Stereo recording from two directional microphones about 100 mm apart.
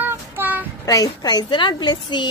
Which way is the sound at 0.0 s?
20° right (ahead or behind).